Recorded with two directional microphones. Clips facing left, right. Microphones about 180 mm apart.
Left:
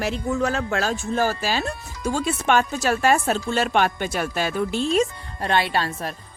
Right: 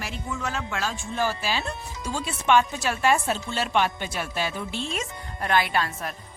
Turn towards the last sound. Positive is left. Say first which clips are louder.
# left 2 dB
turn(degrees=30)  # may be behind; listen again after turning